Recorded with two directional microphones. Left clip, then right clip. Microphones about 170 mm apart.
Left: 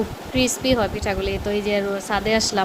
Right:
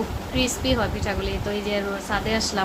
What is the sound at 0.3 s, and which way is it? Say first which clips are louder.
Speech: left 4 dB; 40° left (ahead or behind).